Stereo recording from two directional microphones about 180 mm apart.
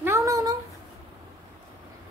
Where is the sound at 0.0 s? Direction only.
15° right (ahead or behind).